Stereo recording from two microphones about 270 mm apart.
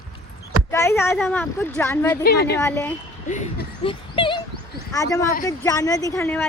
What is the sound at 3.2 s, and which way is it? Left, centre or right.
Speech, left.